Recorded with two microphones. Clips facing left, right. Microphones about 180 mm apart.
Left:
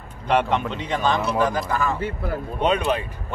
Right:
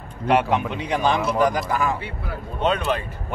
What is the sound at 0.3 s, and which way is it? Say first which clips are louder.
A man's voice: right 1 dB; 10° right (ahead or behind).